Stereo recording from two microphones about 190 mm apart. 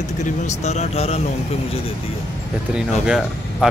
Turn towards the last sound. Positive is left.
turn(degrees=0)  # may be behind; listen again after turning